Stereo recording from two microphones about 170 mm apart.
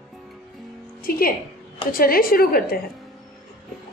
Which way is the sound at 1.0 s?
55° left (ahead or behind).